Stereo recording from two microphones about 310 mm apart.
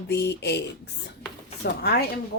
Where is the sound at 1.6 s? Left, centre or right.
Left.